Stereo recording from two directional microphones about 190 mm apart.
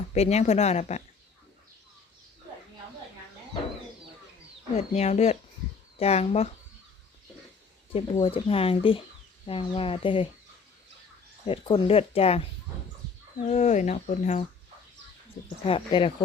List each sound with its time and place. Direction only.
0.1 s speech: 35° left (ahead or behind)
4.9 s speech: 35° left (ahead or behind)
7.9 s speech: 30° left (ahead or behind)
11.4 s speech: 30° left (ahead or behind)
13.0 s chicken: 55° right (ahead or behind)
13.5 s speech: 40° left (ahead or behind)
15.6 s speech: 25° left (ahead or behind)